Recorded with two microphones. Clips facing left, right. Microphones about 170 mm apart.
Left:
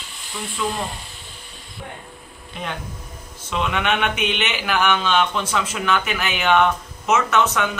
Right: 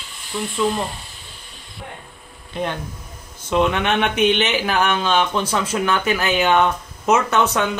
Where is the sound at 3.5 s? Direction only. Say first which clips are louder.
Right 4 dB; 35° right (ahead or behind).